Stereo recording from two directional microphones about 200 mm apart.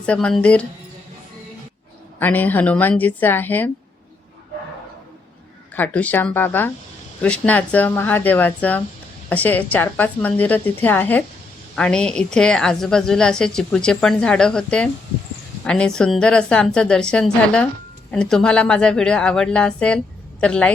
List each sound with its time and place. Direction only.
0.0 s a woman's voice: 5° left (ahead or behind)
2.1 s a woman's voice: 10° left (ahead or behind)
5.7 s a woman's voice: 10° left (ahead or behind)